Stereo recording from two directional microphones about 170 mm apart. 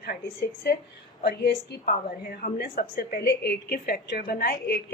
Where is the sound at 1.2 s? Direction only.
70° left (ahead or behind).